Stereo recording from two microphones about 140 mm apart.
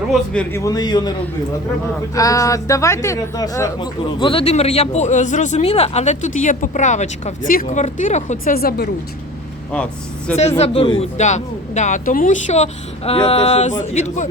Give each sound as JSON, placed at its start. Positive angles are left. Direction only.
{"t": 0.3, "sound": "speech", "side_deg": 20}
{"t": 2.1, "sound": "speech", "side_deg": 25}
{"t": 4.2, "sound": "speech", "side_deg": 40}
{"t": 7.5, "sound": "speech", "side_deg": 75}
{"t": 9.7, "sound": "speech", "side_deg": 10}
{"t": 10.6, "sound": "speech", "side_deg": 40}
{"t": 11.2, "sound": "speech", "side_deg": 55}